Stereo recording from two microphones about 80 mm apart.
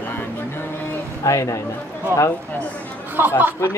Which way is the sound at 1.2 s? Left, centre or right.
Left.